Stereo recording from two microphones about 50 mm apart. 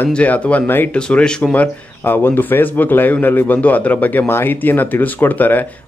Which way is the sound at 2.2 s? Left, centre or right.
Left.